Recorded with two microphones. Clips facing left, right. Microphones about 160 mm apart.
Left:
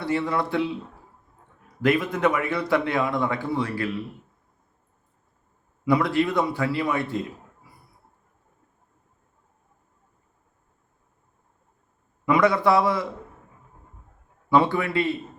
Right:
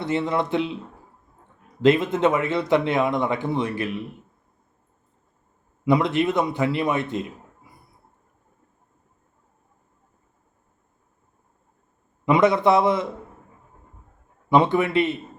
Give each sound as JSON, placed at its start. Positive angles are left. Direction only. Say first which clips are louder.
{"t": 0.0, "sound": "a man's voice", "louder": "right 1 dB", "side_deg": -20}
{"t": 5.8, "sound": "a man's voice", "louder": "right 1 dB", "side_deg": -20}
{"t": 12.2, "sound": "a man's voice", "louder": "right 2 dB", "side_deg": -20}
{"t": 14.5, "sound": "a man's voice", "louder": "right 2 dB", "side_deg": -20}